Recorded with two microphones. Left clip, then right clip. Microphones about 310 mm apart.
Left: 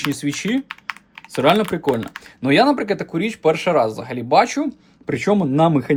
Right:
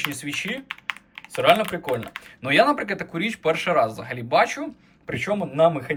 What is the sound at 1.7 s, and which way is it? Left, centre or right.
Speech, left.